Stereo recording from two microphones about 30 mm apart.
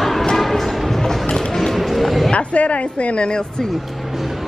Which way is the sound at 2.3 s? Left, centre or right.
Left.